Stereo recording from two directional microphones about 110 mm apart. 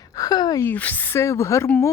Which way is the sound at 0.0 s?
35° left (ahead or behind).